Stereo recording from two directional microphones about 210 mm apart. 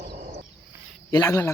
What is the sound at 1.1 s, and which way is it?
Speech, 15° left (ahead or behind).